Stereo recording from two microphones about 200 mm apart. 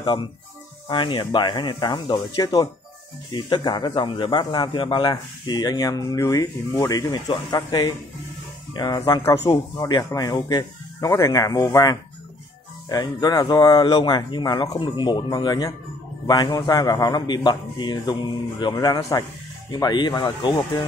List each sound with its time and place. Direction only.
0.0 s speech: 25° left (ahead or behind)